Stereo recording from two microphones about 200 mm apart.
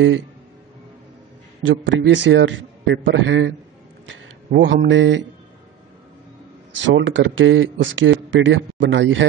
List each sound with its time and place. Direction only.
1.6 s a man's voice: 70° right (ahead or behind)
7.0 s speech: 65° right (ahead or behind)